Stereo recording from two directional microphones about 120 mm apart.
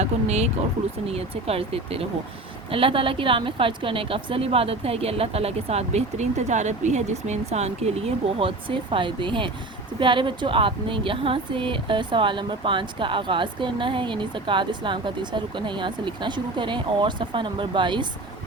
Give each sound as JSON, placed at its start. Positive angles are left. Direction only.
{"t": 0.0, "sound": "speech", "side_deg": -65}